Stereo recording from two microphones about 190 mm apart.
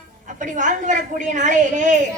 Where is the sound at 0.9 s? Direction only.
40° right (ahead or behind).